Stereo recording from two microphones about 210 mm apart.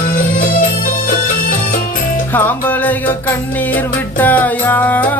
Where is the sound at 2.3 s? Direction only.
10° left (ahead or behind).